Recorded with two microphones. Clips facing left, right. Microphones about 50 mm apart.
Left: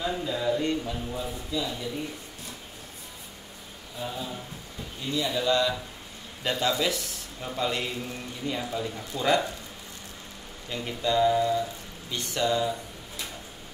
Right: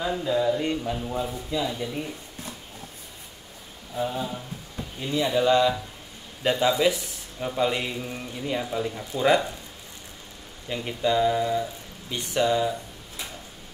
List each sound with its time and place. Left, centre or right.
0.0 s a man's voice: centre
4.0 s a man's voice: right
10.7 s a man's voice: centre